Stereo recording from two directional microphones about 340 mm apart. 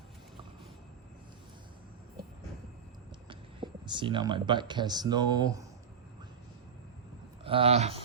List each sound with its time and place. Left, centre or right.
3.2 s speech: centre
7.4 s speech: centre